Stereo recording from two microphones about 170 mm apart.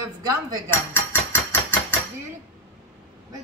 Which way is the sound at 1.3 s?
10° left (ahead or behind).